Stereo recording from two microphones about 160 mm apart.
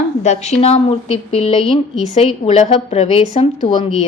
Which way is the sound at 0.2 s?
45° left (ahead or behind).